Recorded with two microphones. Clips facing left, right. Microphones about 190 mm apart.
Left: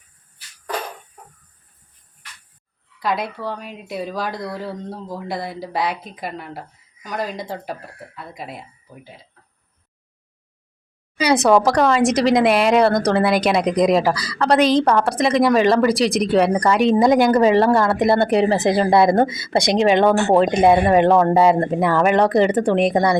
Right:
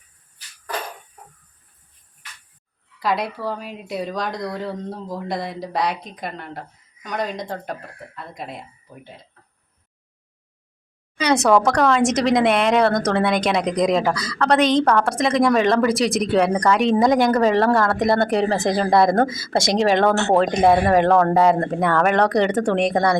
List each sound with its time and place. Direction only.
3.0 s speech: centre (ahead or behind)
11.2 s speech: 5° left (ahead or behind)
20.7 s speech: 20° left (ahead or behind); by 23.0 s centre (ahead or behind)